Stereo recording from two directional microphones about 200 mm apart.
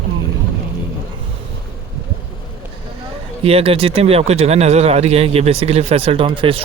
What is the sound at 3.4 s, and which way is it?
Speech, 30° right (ahead or behind).